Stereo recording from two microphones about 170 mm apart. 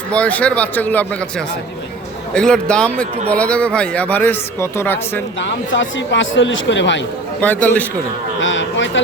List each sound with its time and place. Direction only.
0.1 s speech: 10° left (ahead or behind)
2.3 s speech: 5° left (ahead or behind)
5.4 s speech: 90° left
7.4 s speech: 10° left (ahead or behind)
8.4 s speech: 90° left